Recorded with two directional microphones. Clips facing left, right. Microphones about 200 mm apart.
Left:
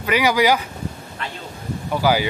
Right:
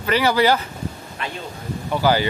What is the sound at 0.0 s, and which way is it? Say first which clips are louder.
Speech: even; 10° left (ahead or behind).